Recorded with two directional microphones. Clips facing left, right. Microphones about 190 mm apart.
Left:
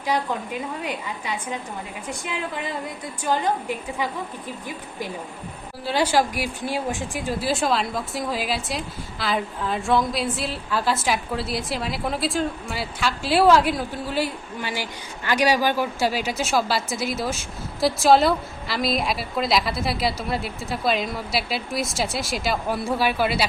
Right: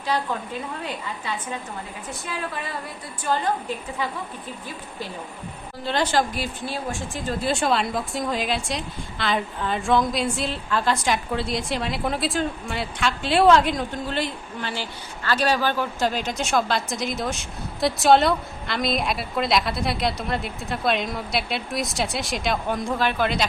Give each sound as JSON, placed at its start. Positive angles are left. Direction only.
{"t": 0.1, "sound": "a woman's voice", "side_deg": 15}
{"t": 5.8, "sound": "speech", "side_deg": 10}